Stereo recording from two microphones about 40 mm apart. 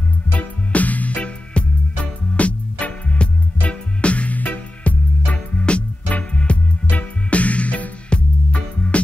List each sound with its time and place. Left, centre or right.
0.3 s music: left